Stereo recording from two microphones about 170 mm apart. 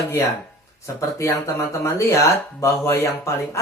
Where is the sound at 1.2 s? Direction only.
15° left (ahead or behind).